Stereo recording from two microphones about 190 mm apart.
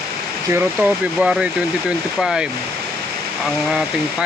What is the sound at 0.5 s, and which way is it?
Speech, 5° right (ahead or behind).